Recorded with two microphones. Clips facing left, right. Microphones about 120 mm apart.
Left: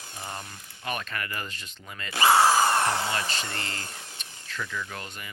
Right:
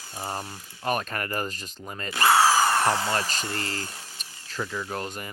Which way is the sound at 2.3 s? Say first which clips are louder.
Even; 5° right (ahead or behind).